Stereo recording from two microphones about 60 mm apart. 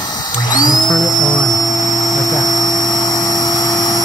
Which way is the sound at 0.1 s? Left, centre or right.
Left.